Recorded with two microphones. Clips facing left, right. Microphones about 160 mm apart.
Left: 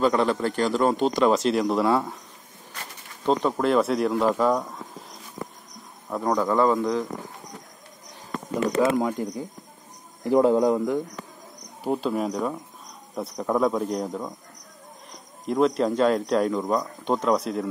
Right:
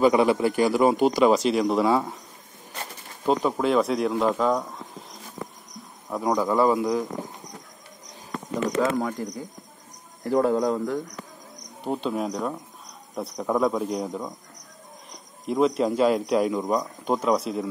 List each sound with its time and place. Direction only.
0.0 s speech: 10° right (ahead or behind)
3.3 s speech: 5° right (ahead or behind)
6.0 s speech: 5° right (ahead or behind)
8.9 s a man's voice: 15° left (ahead or behind)
11.8 s speech: centre (ahead or behind)